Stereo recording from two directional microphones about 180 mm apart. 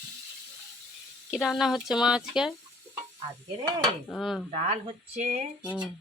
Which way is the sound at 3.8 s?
Centre (ahead or behind).